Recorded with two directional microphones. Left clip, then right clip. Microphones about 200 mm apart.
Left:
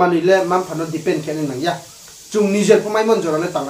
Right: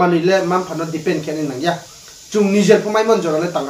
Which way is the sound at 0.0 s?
Centre (ahead or behind).